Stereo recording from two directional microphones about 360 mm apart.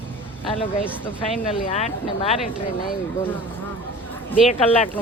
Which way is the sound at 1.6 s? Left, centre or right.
Centre.